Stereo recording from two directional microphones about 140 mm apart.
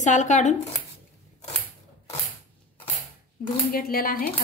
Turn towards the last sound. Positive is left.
turn(degrees=90)